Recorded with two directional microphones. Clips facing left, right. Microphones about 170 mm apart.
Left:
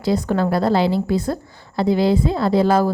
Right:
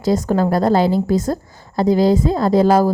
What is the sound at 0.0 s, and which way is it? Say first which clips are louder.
A woman's voice: right 2 dB; 40° right (ahead or behind).